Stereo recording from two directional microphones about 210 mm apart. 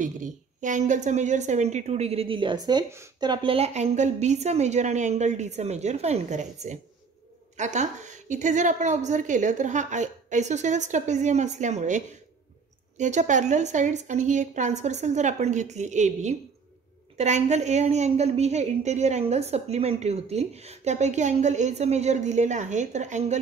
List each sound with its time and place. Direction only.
0.0 s a woman's voice: 35° right (ahead or behind)